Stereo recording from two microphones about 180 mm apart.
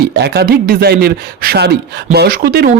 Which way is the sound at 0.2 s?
60° right (ahead or behind).